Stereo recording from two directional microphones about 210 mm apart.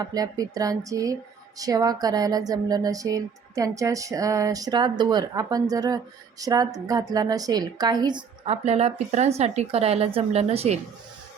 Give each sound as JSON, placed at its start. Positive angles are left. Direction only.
{"t": 0.0, "sound": "a woman's voice", "side_deg": -15}